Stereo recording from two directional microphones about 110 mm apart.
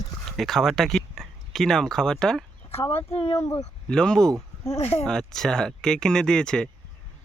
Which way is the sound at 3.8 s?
5° left (ahead or behind).